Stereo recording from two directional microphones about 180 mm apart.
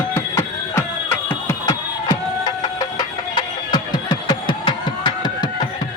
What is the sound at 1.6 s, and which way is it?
Music, 25° left (ahead or behind).